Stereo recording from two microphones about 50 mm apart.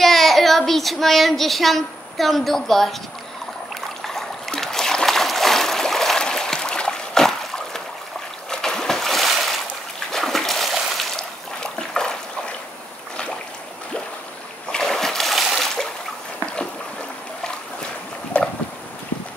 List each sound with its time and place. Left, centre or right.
0.0 s child singing: centre
4.0 s a sound: centre
8.5 s splash: centre
11.1 s trickle: centre
14.7 s splash: centre
18.3 s boat: left